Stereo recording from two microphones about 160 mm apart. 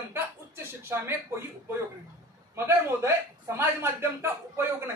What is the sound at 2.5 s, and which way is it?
Speech, 15° right (ahead or behind).